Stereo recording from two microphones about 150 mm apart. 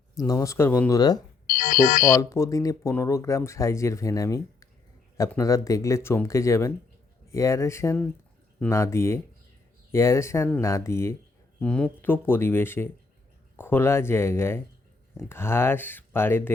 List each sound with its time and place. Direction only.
0.2 s speech: 25° left (ahead or behind)
1.5 s ringtone: 70° left (ahead or behind)
2.0 s speech: 20° left (ahead or behind)
11.6 s speech: 5° left (ahead or behind)